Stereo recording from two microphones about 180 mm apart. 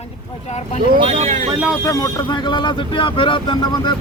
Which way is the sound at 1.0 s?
35° right (ahead or behind).